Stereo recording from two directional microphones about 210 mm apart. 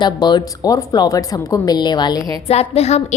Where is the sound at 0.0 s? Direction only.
20° left (ahead or behind).